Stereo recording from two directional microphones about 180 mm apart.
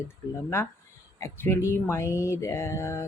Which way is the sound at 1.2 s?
15° left (ahead or behind).